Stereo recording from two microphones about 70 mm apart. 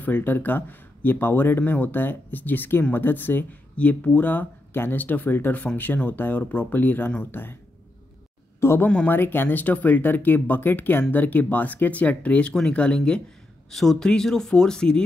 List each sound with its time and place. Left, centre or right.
0.0 s speech: left
8.5 s speech: left
8.8 s speech: left